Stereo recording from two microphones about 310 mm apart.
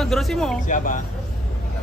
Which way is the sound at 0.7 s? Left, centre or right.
Left.